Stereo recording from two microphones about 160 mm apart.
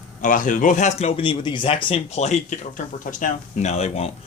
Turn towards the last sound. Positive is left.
turn(degrees=40)  # may be behind; listen again after turning